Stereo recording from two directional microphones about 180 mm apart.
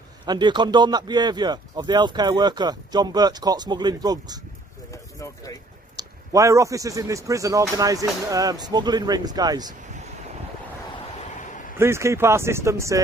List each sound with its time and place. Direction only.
0.2 s a man's voice: 25° right (ahead or behind)
4.9 s a sound: 20° left (ahead or behind)
5.9 s a man's voice: 20° right (ahead or behind)
11.8 s speech: 15° right (ahead or behind)